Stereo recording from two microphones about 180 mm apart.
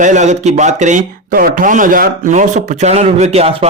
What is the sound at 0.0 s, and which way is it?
Speech, 40° right (ahead or behind).